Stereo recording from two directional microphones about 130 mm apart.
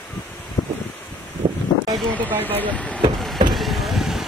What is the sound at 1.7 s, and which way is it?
Wind noise, 35° left (ahead or behind).